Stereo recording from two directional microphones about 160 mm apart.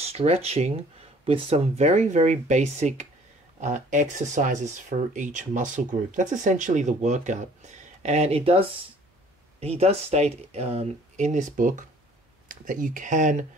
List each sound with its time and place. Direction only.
0.0 s speech: 40° right (ahead or behind)
9.6 s speech: 40° right (ahead or behind)